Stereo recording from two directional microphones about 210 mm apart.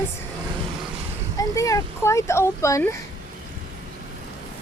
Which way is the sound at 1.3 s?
15° left (ahead or behind).